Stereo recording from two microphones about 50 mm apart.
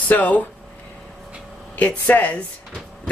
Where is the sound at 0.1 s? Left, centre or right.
Left.